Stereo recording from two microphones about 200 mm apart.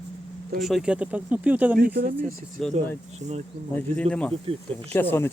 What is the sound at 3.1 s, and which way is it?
Speech, 35° right (ahead or behind).